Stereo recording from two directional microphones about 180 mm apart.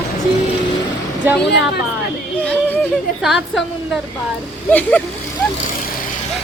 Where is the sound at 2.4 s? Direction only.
10° left (ahead or behind).